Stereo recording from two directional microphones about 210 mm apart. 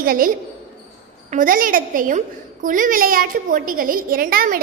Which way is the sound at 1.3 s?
40° right (ahead or behind).